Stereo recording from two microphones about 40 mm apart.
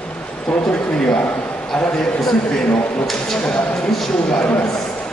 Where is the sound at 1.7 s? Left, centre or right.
Centre.